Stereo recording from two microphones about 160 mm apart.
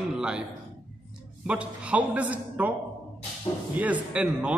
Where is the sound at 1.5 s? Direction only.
10° right (ahead or behind).